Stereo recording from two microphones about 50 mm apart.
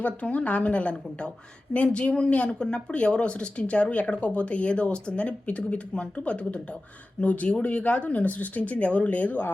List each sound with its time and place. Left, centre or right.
0.0 s speech: left